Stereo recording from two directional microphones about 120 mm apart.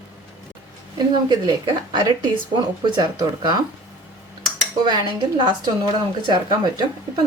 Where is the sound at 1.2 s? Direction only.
35° right (ahead or behind).